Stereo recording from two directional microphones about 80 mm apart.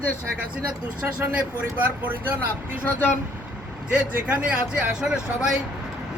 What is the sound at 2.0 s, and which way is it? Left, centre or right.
Speech, right.